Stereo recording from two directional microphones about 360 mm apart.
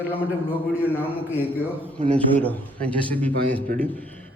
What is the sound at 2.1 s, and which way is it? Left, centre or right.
A man's voice, centre.